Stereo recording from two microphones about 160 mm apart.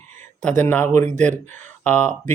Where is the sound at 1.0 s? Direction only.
50° right (ahead or behind).